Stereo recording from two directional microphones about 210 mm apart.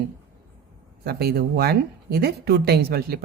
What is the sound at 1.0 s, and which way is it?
Speech, 50° right (ahead or behind).